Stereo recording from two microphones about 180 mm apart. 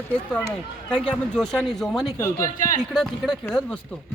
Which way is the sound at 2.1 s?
15° left (ahead or behind).